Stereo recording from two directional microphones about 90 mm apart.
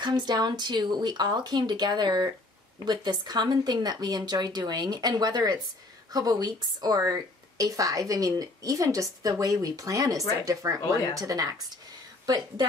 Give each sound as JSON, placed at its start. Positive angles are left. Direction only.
{"t": 0.0, "sound": "a woman's voice", "side_deg": -55}